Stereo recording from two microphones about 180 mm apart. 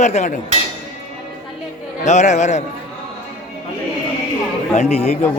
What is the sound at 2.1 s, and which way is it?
Speech, 40° left (ahead or behind).